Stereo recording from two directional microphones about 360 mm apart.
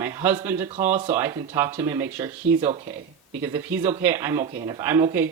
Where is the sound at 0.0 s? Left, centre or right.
Centre.